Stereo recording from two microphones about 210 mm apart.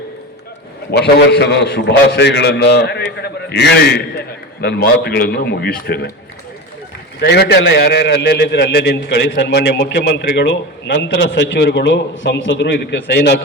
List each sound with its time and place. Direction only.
0.9 s a man's voice: 50° left (ahead or behind)
7.2 s a man's voice: 55° left (ahead or behind)